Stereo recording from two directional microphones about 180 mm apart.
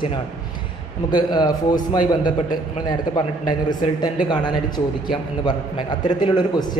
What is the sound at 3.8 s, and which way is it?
A man's voice, 25° left (ahead or behind).